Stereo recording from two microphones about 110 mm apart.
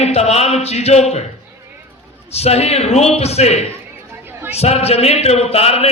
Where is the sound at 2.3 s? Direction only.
70° left (ahead or behind).